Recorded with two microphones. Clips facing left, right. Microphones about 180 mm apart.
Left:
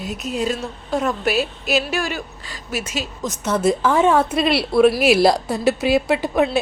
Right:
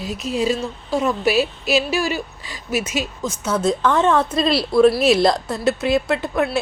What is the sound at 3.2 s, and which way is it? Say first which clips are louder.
A woman's voice: left 3 dB; centre (ahead or behind).